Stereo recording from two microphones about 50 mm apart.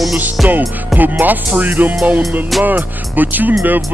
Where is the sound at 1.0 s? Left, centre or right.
Right.